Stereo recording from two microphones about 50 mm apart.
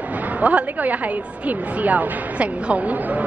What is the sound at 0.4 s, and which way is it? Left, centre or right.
A woman's voice, right.